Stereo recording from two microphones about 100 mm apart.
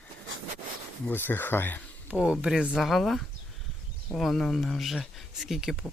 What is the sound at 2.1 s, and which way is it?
Speech, 10° right (ahead or behind).